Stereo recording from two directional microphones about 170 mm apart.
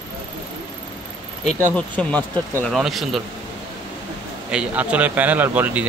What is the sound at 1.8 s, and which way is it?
Speech, 10° left (ahead or behind).